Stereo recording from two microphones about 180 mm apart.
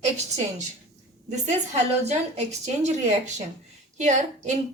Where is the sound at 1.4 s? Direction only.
40° right (ahead or behind).